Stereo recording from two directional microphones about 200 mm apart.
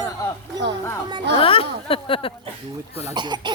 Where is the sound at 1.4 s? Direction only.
25° left (ahead or behind).